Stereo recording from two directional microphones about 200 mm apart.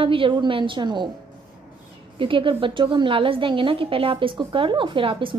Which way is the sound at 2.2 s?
25° right (ahead or behind).